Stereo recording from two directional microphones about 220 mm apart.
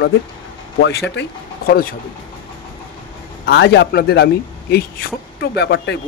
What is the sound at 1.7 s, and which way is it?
Speech, 40° left (ahead or behind).